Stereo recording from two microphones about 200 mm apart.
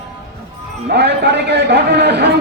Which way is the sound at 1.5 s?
55° right (ahead or behind).